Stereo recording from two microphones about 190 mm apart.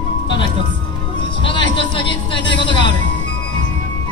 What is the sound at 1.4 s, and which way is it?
Speech, 25° left (ahead or behind).